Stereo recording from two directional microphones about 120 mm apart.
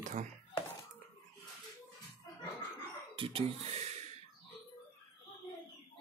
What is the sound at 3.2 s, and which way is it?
Speech, 50° right (ahead or behind).